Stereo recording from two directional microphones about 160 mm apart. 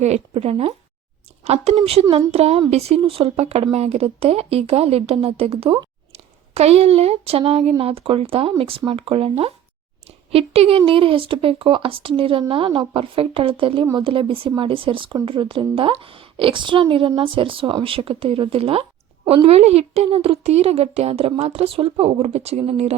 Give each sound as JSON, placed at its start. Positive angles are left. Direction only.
{"t": 0.0, "sound": "speech", "side_deg": -40}
{"t": 1.7, "sound": "speech", "side_deg": -35}